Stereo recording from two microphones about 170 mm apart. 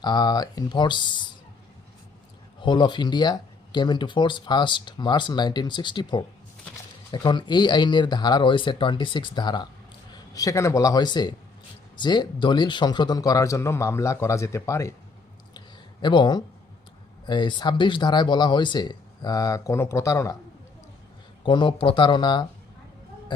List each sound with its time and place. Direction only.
0.0 s speech: 25° left (ahead or behind)
2.6 s a man's voice: 25° left (ahead or behind)
15.5 s a sound: 25° left (ahead or behind)
17.2 s speech: 25° left (ahead or behind)
21.4 s speech: 30° left (ahead or behind)